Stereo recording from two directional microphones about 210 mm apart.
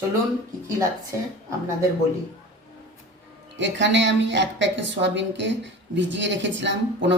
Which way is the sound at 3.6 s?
60° right (ahead or behind).